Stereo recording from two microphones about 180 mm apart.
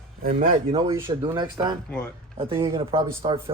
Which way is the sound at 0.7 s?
30° right (ahead or behind).